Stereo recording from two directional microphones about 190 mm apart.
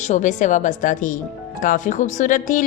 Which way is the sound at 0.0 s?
40° left (ahead or behind).